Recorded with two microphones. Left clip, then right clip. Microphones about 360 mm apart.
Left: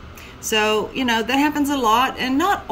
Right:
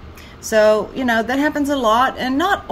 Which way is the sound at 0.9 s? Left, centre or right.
Centre.